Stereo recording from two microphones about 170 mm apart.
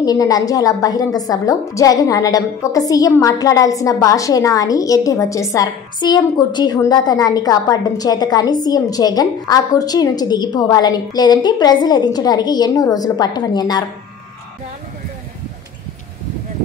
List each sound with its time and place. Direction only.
0.0 s a woman's voice: 20° left (ahead or behind)